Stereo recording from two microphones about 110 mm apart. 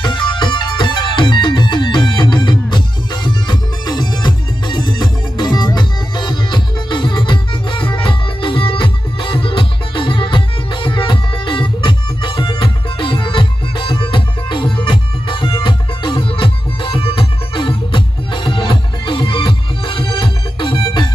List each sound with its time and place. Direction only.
0.0 s music: 45° left (ahead or behind)